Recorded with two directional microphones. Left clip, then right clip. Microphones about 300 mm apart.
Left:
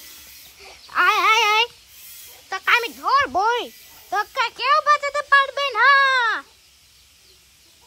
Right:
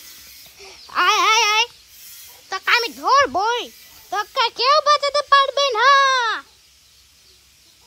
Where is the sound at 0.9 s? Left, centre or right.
Centre.